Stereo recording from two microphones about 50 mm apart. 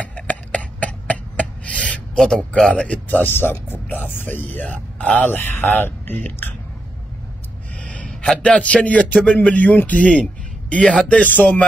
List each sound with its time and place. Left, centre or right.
0.0 s rub: left
2.1 s a man's voice: centre
2.7 s a man's voice: left
3.2 s speech: left
4.6 s a man's voice: left
5.3 s speech: left
7.8 s a man's voice: left